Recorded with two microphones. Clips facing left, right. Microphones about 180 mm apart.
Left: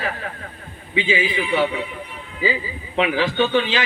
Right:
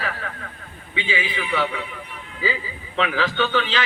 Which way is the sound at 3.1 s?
35° left (ahead or behind).